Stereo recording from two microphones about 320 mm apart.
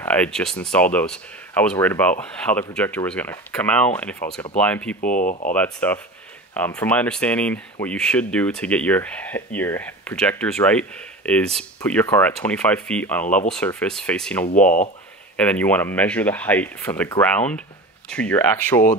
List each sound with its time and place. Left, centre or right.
0.0 s speech: centre
5.0 s speech: left
5.5 s speech: centre
14.5 s speech: left
15.3 s speech: centre